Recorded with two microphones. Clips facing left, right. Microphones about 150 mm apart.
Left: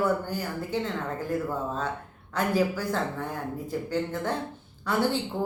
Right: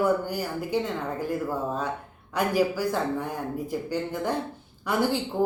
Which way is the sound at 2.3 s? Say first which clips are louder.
Right 2 dB; 10° right (ahead or behind).